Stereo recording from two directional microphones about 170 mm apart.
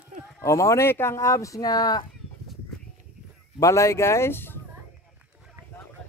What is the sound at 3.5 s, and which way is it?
Speech, 20° left (ahead or behind).